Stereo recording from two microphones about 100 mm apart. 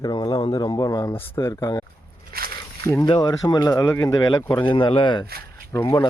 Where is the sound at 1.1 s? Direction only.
25° left (ahead or behind).